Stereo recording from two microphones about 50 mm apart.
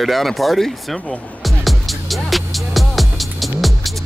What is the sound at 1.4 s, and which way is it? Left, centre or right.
Music, centre.